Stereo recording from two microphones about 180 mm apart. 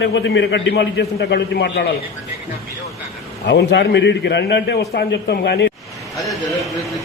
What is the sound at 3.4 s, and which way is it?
A man's voice, 70° left (ahead or behind).